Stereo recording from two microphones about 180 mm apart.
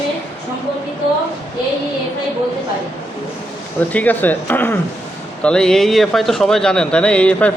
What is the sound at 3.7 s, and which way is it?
Speech, 10° left (ahead or behind).